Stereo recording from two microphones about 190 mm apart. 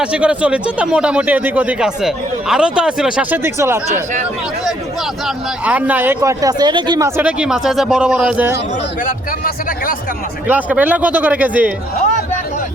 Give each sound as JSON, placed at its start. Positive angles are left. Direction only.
{"t": 0.0, "sound": "speech", "side_deg": -5}
{"t": 5.2, "sound": "speech", "side_deg": -10}
{"t": 7.2, "sound": "speech", "side_deg": -5}
{"t": 9.0, "sound": "a man's voice", "side_deg": 50}
{"t": 10.4, "sound": "speech", "side_deg": -10}